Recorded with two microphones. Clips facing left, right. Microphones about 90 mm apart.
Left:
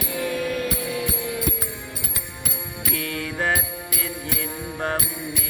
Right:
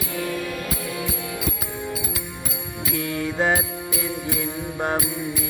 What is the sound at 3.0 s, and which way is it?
Music, 20° right (ahead or behind).